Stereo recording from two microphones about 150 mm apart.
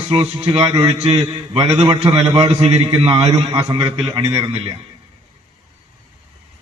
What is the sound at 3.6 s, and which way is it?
A man's voice, 30° right (ahead or behind).